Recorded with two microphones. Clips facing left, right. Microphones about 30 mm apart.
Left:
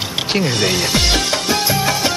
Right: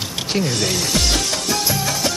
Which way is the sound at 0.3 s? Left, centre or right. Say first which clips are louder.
Left 3 dB; left.